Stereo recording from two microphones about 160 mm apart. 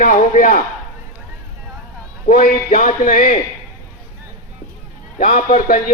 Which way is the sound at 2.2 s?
60° left (ahead or behind).